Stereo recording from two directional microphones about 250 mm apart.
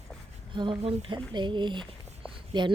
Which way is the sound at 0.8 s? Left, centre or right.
Right.